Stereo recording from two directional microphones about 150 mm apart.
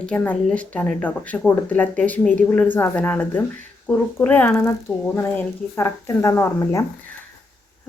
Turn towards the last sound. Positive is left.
turn(degrees=15)  # may be behind; listen again after turning